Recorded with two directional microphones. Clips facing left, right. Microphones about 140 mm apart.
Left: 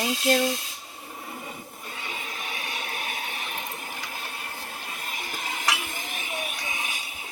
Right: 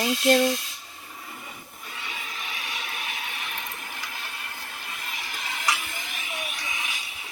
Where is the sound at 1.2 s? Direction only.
30° left (ahead or behind).